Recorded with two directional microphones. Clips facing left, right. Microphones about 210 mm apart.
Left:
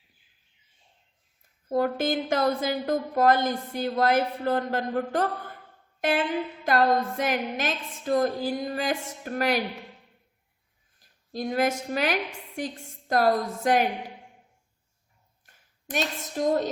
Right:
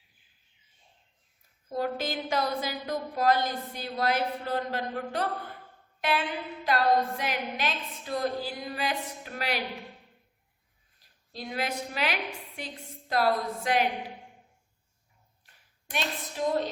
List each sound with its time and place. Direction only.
1.7 s a woman's voice: 50° left (ahead or behind)
6.0 s a sound: 50° left (ahead or behind)
6.7 s a woman's voice: 50° left (ahead or behind)
11.3 s a woman's voice: 45° left (ahead or behind)
15.4 s a woman's voice: 45° left (ahead or behind)